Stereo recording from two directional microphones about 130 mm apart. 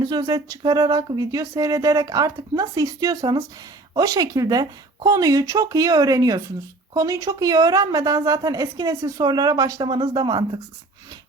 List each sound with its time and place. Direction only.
0.0 s a woman's voice: 30° right (ahead or behind)